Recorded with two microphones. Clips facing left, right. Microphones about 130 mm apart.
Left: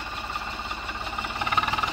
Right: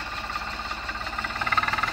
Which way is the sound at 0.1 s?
5° left (ahead or behind).